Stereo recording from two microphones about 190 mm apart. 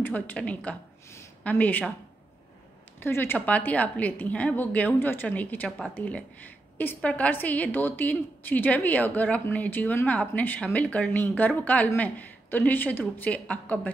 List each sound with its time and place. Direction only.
0.0 s a woman's voice: 10° left (ahead or behind)
3.0 s a woman's voice: 10° left (ahead or behind)